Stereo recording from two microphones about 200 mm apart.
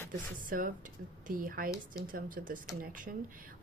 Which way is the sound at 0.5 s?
45° right (ahead or behind).